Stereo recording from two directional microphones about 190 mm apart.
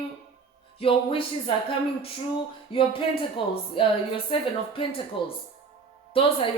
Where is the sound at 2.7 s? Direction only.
30° left (ahead or behind).